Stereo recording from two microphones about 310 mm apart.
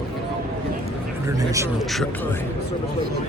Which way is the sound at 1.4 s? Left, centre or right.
Centre.